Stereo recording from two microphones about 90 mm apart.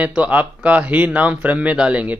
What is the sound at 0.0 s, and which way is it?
Speech, 15° right (ahead or behind).